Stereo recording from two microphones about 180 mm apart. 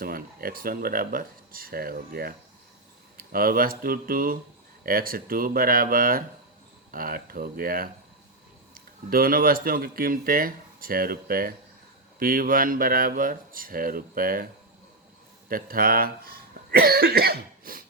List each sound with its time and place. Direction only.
0.0 s speech: 55° right (ahead or behind)
3.3 s speech: 55° right (ahead or behind)
9.0 s speech: 55° right (ahead or behind)
15.4 s speech: 55° right (ahead or behind)